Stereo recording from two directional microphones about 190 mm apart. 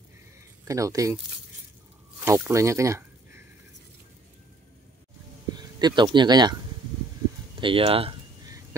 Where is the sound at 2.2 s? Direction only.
10° right (ahead or behind).